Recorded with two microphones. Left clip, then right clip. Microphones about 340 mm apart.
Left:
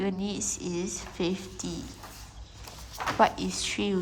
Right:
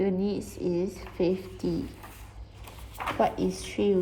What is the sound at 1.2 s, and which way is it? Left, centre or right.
Speech, centre.